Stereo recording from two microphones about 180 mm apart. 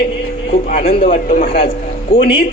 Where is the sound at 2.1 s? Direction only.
30° left (ahead or behind).